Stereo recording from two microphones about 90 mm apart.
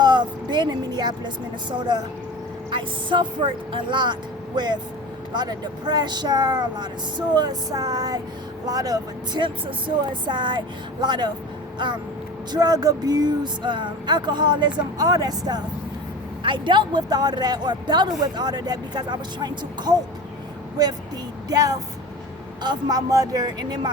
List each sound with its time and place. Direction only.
0.0 s vehicle: 55° right (ahead or behind)
2.6 s speech: 65° right (ahead or behind); by 9.4 s 45° right (ahead or behind)
9.4 s speech: 65° right (ahead or behind)
12.5 s speech: 45° right (ahead or behind)
16.4 s speech: 60° right (ahead or behind)
21.5 s speech: 45° right (ahead or behind)